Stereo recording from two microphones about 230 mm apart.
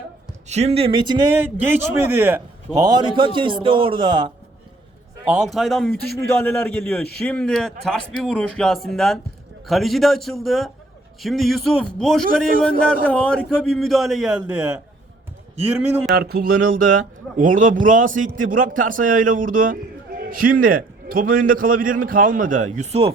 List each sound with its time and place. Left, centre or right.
0.4 s speech: right
1.4 s a man's voice: centre
5.3 s a man's voice: centre
16.1 s a man's voice: right